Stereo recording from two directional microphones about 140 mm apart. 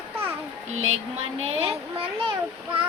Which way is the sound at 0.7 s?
50° right (ahead or behind).